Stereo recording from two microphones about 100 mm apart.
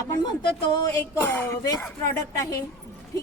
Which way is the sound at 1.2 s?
25° left (ahead or behind).